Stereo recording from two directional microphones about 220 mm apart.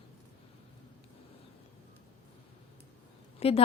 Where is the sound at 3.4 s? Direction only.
30° left (ahead or behind).